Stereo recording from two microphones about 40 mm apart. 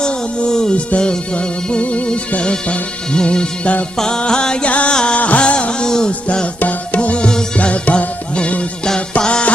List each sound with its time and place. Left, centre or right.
0.0 s music: left
5.1 s music: left
5.8 s music: centre
6.1 s music: left
7.3 s music: left